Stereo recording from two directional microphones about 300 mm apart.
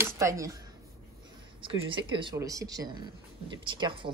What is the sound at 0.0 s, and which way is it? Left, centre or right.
Speech, centre.